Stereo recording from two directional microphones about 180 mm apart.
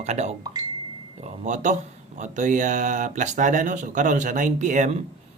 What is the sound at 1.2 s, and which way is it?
Speech, 40° right (ahead or behind).